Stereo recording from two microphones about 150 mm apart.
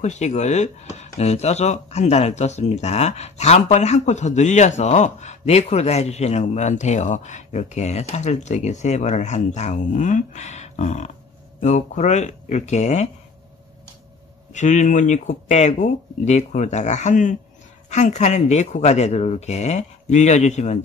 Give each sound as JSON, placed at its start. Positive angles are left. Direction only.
{"t": 0.0, "sound": "speech", "side_deg": 50}
{"t": 14.5, "sound": "speech", "side_deg": 55}